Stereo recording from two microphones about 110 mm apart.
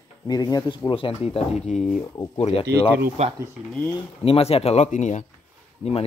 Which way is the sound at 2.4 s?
65° left (ahead or behind).